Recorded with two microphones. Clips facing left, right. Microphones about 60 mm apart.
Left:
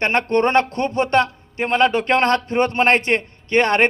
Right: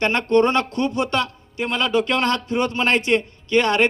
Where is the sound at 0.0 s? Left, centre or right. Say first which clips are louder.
Even; left.